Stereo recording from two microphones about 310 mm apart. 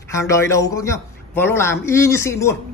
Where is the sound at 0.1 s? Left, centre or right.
Centre.